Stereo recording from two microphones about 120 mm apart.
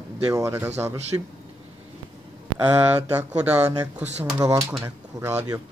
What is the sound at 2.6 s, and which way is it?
Speech, 15° right (ahead or behind).